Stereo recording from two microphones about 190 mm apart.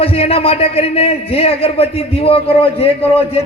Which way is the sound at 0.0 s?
30° left (ahead or behind).